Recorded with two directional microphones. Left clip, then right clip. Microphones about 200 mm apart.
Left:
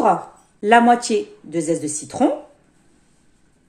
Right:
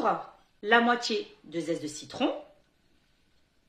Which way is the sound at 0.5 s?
30° left (ahead or behind).